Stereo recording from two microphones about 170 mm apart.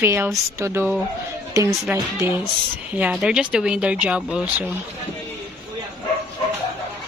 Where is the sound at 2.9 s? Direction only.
5° right (ahead or behind).